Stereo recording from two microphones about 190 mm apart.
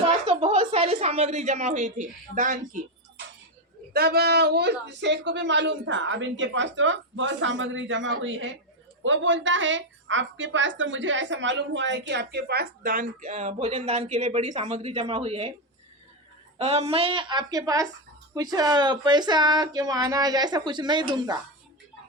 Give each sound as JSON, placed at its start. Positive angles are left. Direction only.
{"t": 0.0, "sound": "a woman's voice", "side_deg": -30}
{"t": 3.9, "sound": "a woman's voice", "side_deg": -55}
{"t": 16.6, "sound": "speech", "side_deg": -35}